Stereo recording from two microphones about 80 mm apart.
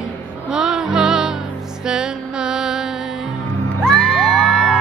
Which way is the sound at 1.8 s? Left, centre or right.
Centre.